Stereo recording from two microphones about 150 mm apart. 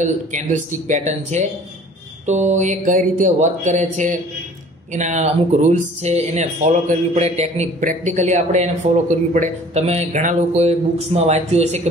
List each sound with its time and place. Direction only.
0.0 s speech: 55° right (ahead or behind)